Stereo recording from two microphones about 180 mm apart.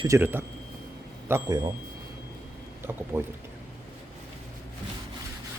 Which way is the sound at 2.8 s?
15° right (ahead or behind).